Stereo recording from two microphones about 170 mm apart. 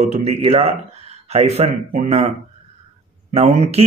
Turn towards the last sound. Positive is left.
turn(degrees=-40)  # may be behind; listen again after turning